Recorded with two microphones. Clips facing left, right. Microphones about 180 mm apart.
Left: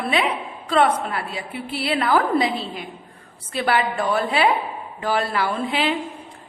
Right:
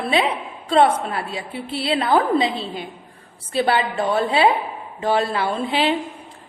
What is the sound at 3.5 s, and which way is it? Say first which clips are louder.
A woman's voice: right 2 dB; 25° right (ahead or behind).